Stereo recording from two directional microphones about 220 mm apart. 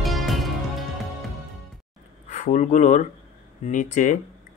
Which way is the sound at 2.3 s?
35° left (ahead or behind).